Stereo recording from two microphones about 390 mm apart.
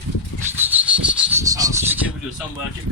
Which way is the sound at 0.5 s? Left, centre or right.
Centre.